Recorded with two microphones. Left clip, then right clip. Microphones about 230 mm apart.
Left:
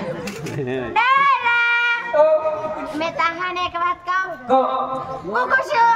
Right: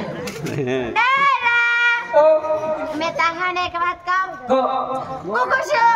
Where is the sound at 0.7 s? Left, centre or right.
Centre.